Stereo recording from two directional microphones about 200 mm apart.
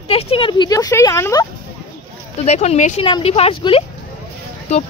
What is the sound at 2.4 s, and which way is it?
A woman's voice, 35° left (ahead or behind).